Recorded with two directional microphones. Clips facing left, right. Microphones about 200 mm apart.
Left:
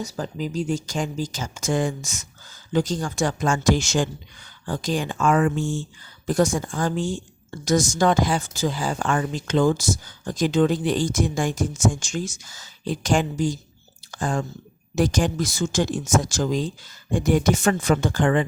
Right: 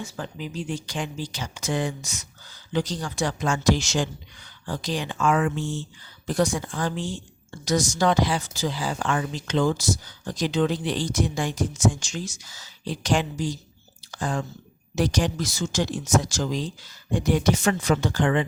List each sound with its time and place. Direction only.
0.0 s speech: 40° left (ahead or behind)